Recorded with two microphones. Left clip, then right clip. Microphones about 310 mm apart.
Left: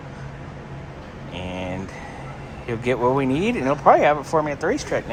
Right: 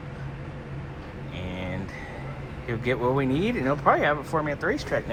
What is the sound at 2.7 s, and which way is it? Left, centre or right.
Speech, centre.